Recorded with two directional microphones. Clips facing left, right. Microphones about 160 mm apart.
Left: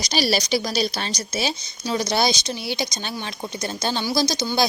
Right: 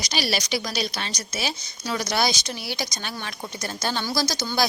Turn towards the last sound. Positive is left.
turn(degrees=15)  # may be behind; listen again after turning